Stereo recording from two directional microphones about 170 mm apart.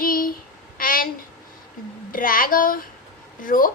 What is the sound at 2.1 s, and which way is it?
A woman's voice, 55° left (ahead or behind).